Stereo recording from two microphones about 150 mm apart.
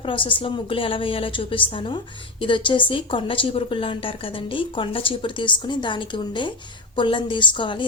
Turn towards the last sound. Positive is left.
turn(degrees=35)  # may be behind; listen again after turning